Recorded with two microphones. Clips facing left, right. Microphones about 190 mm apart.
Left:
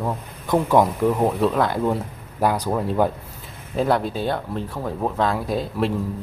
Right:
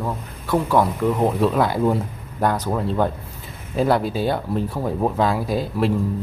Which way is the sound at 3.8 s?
5° right (ahead or behind).